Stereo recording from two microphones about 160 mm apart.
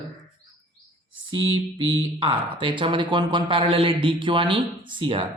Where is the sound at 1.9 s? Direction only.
35° right (ahead or behind).